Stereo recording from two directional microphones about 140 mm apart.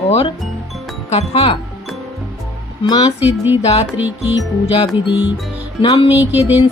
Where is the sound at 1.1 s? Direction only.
45° left (ahead or behind).